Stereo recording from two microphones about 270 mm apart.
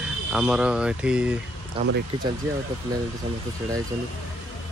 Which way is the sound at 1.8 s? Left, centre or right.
Right.